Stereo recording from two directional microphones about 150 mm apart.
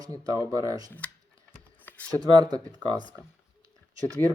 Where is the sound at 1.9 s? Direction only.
10° left (ahead or behind).